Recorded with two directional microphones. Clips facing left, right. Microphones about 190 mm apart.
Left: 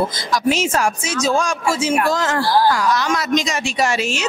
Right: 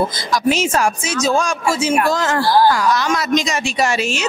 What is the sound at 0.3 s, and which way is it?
Speech, 5° right (ahead or behind).